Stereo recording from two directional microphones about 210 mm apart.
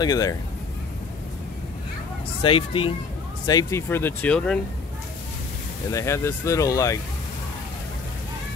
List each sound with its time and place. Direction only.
0.0 s speech: 15° left (ahead or behind)
2.4 s speech: 25° left (ahead or behind)
3.4 s speech: 15° left (ahead or behind)
5.9 s speech: 15° left (ahead or behind)